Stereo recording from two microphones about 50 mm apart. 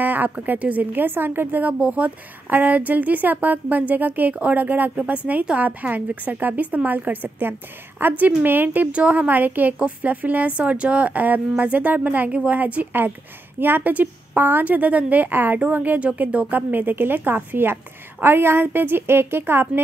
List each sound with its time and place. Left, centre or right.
0.0 s a woman's voice: right
8.9 s a woman's voice: right
9.3 s a woman's voice: right
13.6 s a woman's voice: right
16.5 s a woman's voice: right